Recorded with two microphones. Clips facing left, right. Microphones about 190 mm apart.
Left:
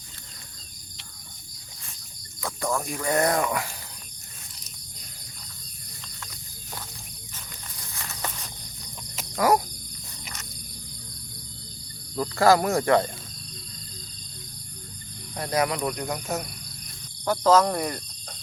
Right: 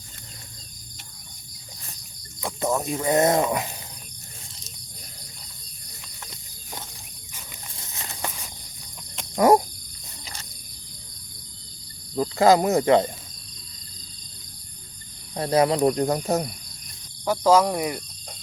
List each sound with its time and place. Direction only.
2.4 s speech: 20° right (ahead or behind)
7.8 s horse: 25° right (ahead or behind)
9.3 s speech: 25° right (ahead or behind)
12.1 s speech: 20° right (ahead or behind)
15.4 s speech: 30° right (ahead or behind)
17.2 s speech: 10° right (ahead or behind)